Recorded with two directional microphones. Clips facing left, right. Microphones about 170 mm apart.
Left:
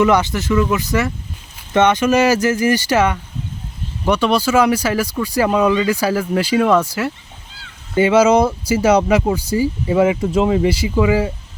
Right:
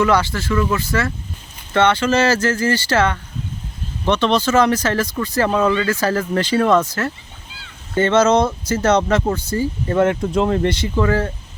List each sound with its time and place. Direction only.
0.0 s speech: 20° left (ahead or behind)